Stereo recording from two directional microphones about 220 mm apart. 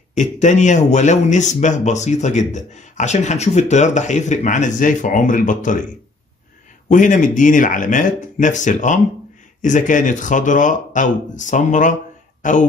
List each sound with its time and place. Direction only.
0.1 s a man's voice: 35° left (ahead or behind)
6.9 s a man's voice: 35° left (ahead or behind)